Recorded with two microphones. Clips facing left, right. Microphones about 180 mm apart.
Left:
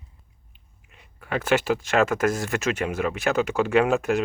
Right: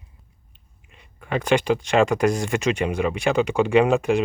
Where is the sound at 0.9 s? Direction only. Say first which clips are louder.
Right 2 dB; 5° left (ahead or behind).